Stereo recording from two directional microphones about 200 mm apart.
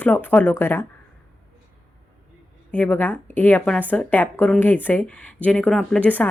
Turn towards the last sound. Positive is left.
turn(degrees=5)  # may be behind; listen again after turning